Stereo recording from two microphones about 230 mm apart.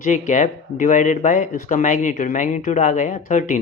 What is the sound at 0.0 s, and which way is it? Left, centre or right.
Speech, left.